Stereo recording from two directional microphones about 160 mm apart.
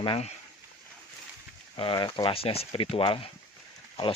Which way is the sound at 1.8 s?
30° left (ahead or behind).